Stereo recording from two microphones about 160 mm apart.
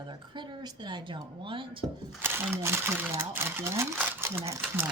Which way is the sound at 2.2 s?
15° right (ahead or behind).